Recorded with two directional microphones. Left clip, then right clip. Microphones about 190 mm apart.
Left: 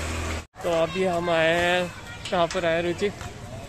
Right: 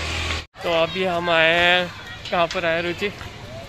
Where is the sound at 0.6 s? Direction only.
Centre (ahead or behind).